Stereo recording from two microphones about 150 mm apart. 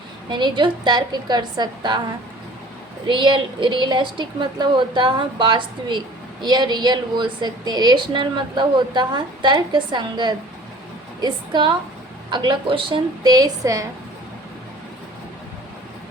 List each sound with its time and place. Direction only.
0.3 s a woman's voice: 30° right (ahead or behind)
3.1 s a woman's voice: 30° right (ahead or behind)